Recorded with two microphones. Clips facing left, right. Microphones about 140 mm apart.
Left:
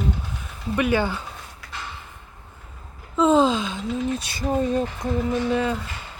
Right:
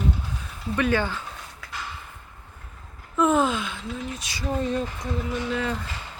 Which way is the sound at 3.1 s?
20° left (ahead or behind).